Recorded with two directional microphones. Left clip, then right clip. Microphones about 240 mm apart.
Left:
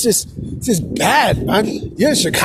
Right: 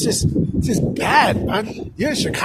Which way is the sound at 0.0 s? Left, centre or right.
Left.